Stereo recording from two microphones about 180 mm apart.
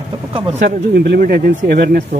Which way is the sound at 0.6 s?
65° right (ahead or behind).